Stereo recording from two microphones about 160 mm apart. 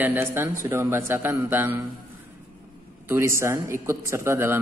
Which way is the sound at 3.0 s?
15° right (ahead or behind).